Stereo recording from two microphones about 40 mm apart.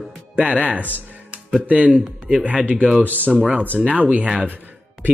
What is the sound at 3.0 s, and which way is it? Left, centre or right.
Speech, right.